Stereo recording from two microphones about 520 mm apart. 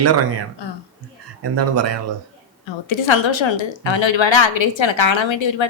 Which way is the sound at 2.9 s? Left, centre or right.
Left.